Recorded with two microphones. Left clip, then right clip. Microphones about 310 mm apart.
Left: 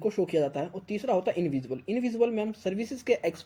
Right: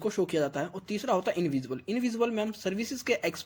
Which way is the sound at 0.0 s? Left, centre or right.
Right.